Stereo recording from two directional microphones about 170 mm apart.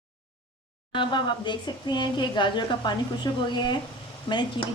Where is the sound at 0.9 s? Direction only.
30° left (ahead or behind).